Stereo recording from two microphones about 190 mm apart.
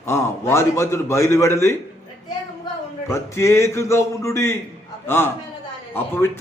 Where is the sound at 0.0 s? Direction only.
15° left (ahead or behind).